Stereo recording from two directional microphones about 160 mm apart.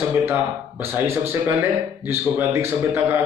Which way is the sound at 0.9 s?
15° right (ahead or behind).